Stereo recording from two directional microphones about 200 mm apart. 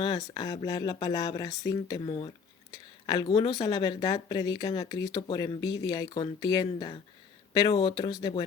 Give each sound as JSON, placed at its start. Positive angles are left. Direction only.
{"t": 0.3, "sound": "speech", "side_deg": 20}